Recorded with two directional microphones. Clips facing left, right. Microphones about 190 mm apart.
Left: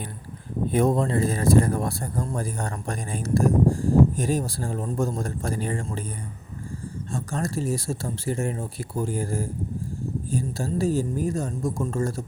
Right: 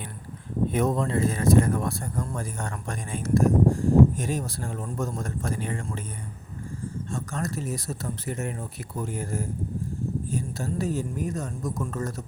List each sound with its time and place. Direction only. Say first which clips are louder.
0.7 s speech: left 4 dB; 30° left (ahead or behind)
7.1 s speech: left 4 dB; 30° left (ahead or behind)